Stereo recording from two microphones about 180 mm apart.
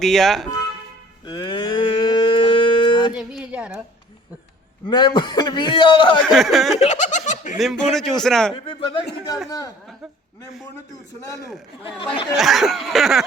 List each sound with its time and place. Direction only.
0.0 s a man's voice: centre (ahead or behind)
1.2 s a sound: 25° left (ahead or behind)
3.1 s a sound: 5° right (ahead or behind)
4.9 s speech: 25° left (ahead or behind)
6.2 s a man's voice: centre (ahead or behind)
6.7 s giggle: 40° left (ahead or behind)
7.6 s a man's voice: centre (ahead or behind)
8.5 s speech: 30° left (ahead or behind)
12.4 s a man's voice: centre (ahead or behind)